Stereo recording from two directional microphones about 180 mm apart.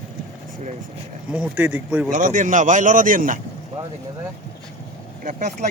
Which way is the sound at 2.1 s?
45° right (ahead or behind).